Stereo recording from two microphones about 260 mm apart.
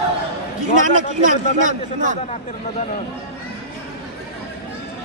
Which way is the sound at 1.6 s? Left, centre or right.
Right.